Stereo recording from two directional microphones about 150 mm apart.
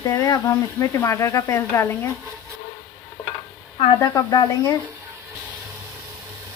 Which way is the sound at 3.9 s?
20° left (ahead or behind).